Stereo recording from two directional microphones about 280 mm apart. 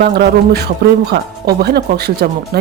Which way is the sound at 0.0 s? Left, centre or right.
Right.